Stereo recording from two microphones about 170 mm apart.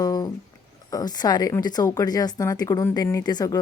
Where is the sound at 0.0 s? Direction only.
20° left (ahead or behind).